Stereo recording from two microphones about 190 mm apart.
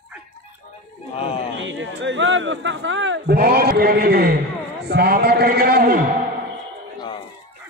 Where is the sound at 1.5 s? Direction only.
80° right; by 4.3 s 55° right (ahead or behind).